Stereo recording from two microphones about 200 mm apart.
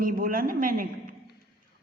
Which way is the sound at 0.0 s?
45° right (ahead or behind).